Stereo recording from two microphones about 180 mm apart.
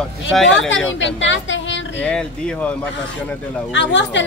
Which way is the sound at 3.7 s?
85° left.